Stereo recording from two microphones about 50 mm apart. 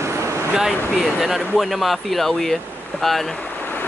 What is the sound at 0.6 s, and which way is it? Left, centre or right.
Speech, centre.